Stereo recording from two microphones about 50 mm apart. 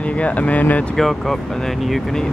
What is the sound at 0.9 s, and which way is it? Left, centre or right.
Speech, centre.